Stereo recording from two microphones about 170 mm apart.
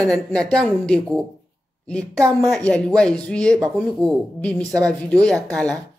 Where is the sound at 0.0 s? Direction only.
5° left (ahead or behind).